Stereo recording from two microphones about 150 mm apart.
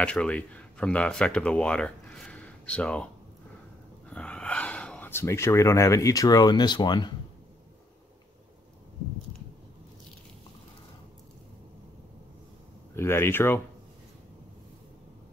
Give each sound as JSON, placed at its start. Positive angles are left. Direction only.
{"t": 0.0, "sound": "speech", "side_deg": 10}
{"t": 4.1, "sound": "speech", "side_deg": 10}
{"t": 12.9, "sound": "speech", "side_deg": 15}